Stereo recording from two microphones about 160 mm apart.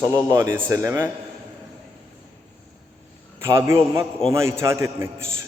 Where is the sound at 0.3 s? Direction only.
15° right (ahead or behind).